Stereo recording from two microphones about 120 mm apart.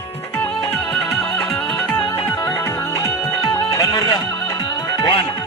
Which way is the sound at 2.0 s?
35° left (ahead or behind).